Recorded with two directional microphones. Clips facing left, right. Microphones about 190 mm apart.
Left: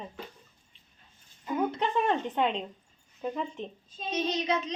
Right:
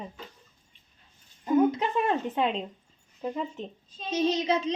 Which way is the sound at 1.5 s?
10° right (ahead or behind).